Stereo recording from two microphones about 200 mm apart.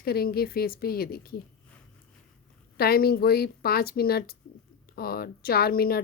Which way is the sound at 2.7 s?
50° left (ahead or behind).